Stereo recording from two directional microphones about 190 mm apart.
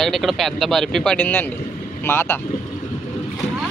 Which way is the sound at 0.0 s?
Centre (ahead or behind).